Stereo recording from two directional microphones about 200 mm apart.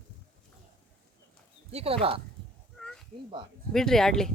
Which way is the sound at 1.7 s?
30° right (ahead or behind).